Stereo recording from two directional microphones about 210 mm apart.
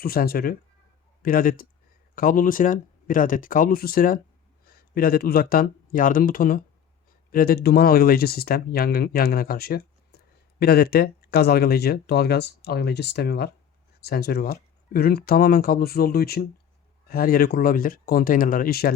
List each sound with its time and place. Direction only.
0.0 s speech: 45° left (ahead or behind)